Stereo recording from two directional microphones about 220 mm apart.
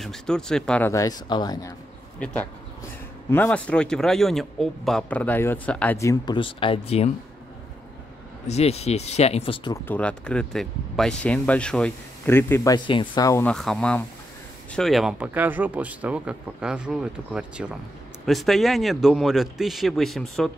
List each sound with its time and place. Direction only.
0.0 s speech: centre (ahead or behind); by 7.1 s 25° left (ahead or behind)
8.5 s speech: 30° left (ahead or behind)
9.8 s speech: 5° left (ahead or behind)